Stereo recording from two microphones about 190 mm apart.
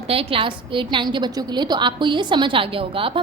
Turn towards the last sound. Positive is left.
turn(degrees=-30)  # may be behind; listen again after turning